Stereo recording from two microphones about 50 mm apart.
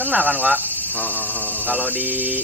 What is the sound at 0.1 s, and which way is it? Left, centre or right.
Speech, right.